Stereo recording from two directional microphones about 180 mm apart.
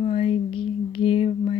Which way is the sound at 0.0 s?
30° left (ahead or behind).